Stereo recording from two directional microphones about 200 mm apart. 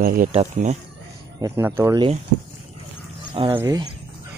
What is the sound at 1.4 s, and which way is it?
Speech, 15° right (ahead or behind).